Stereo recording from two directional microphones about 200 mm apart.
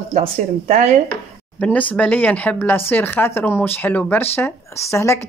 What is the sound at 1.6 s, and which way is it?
Speech, 5° left (ahead or behind).